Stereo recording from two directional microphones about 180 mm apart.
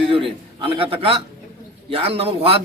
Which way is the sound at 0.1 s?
30° right (ahead or behind).